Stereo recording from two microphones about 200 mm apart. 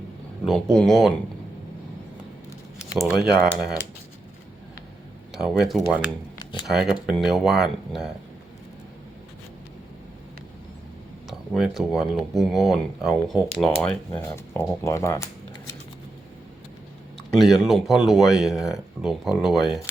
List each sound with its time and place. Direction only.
0.4 s speech: 5° left (ahead or behind)
3.2 s speech: centre (ahead or behind)
5.3 s speech: centre (ahead or behind)
6.4 s a sound: 20° left (ahead or behind)
6.7 s speech: centre (ahead or behind)
11.3 s speech: centre (ahead or behind)
13.8 s speech: 10° left (ahead or behind)
14.8 s shuffling cards: 15° left (ahead or behind)
17.3 s speech: centre (ahead or behind)